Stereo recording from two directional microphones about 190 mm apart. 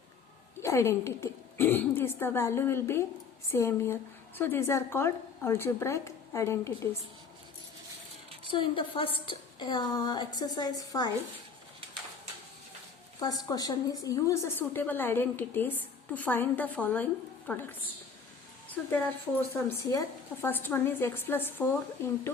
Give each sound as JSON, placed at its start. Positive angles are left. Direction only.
{"t": 0.6, "sound": "a woman's voice", "side_deg": 15}
{"t": 8.4, "sound": "a woman's voice", "side_deg": 25}
{"t": 13.1, "sound": "a woman's voice", "side_deg": 20}